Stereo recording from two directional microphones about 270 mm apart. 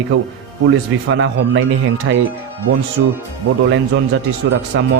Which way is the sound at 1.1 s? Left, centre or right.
Right.